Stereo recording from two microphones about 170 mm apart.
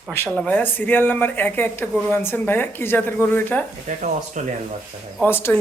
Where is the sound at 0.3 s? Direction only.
10° left (ahead or behind).